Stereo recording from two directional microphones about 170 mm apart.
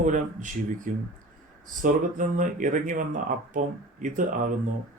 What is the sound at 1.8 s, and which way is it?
Speech, 50° right (ahead or behind).